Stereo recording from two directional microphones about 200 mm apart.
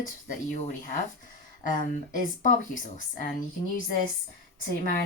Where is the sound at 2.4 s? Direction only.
40° left (ahead or behind).